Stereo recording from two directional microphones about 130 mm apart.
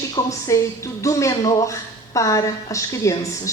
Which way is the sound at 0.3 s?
25° left (ahead or behind).